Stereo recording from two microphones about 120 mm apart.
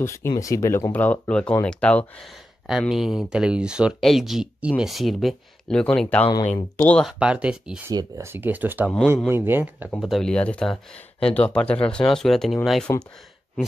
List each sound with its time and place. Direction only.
0.0 s speech: 25° left (ahead or behind)
2.9 s speech: centre (ahead or behind)
7.1 s speech: 10° right (ahead or behind)
7.9 s speech: 35° right (ahead or behind)
8.3 s speech: 15° right (ahead or behind)
9.8 s speech: centre (ahead or behind)